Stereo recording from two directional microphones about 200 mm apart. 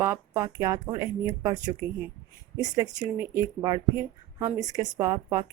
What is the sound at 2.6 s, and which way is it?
Speech, 20° right (ahead or behind).